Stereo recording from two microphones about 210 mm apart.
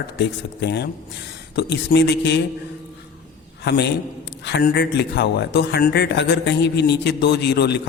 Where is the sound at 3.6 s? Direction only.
55° left (ahead or behind).